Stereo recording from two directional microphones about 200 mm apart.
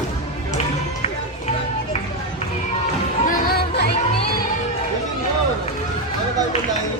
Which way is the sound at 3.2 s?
45° left (ahead or behind).